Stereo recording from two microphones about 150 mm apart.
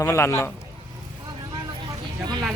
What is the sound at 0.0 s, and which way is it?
Speech, 20° left (ahead or behind).